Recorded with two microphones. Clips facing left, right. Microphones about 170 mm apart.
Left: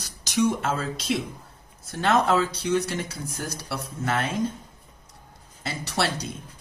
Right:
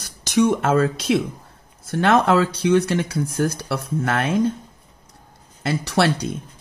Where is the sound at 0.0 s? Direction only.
60° right (ahead or behind).